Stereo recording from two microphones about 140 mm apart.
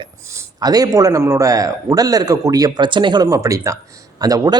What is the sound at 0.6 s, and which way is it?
Speech, 25° right (ahead or behind).